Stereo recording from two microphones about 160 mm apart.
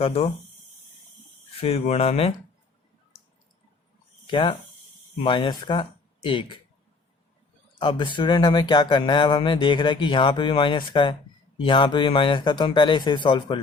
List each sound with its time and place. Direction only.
0.0 s speech: 35° left (ahead or behind)
1.5 s speech: 40° left (ahead or behind)
4.3 s speech: 30° left (ahead or behind)
7.8 s speech: 30° left (ahead or behind)